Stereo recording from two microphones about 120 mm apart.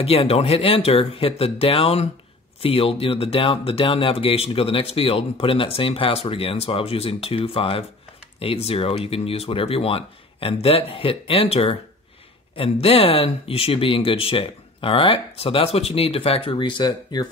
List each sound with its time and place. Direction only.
0.0 s speech: 55° left (ahead or behind); by 17.3 s 35° left (ahead or behind)